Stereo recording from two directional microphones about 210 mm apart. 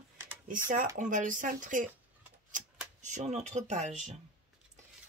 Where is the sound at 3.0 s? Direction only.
35° right (ahead or behind).